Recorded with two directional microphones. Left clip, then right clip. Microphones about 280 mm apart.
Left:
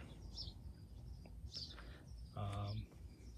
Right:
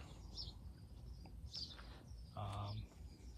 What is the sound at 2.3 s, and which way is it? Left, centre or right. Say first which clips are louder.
Bird: even; centre.